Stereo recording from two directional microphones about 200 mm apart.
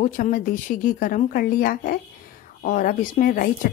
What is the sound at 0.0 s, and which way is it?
Speech, 40° left (ahead or behind).